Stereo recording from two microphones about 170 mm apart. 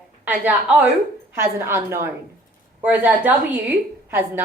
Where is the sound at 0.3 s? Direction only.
10° right (ahead or behind).